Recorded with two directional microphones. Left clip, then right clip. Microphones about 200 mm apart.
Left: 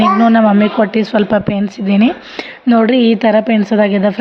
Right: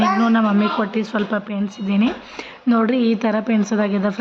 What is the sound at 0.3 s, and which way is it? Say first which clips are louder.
A woman's voice: left 8 dB; 20° left (ahead or behind).